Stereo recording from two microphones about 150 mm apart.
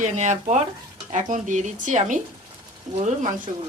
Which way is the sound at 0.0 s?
55° right (ahead or behind).